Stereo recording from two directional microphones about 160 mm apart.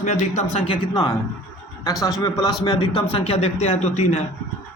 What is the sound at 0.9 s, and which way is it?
Speech, 25° left (ahead or behind).